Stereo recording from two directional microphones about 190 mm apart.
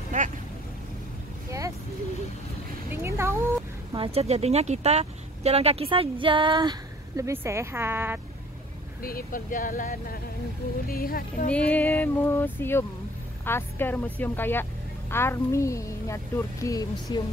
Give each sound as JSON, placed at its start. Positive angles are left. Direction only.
{"t": 0.1, "sound": "boat", "side_deg": -40}
{"t": 2.9, "sound": "a sound", "side_deg": -15}
{"t": 3.9, "sound": "speech", "side_deg": -30}
{"t": 9.0, "sound": "speech", "side_deg": 50}
{"t": 11.7, "sound": "speech", "side_deg": 10}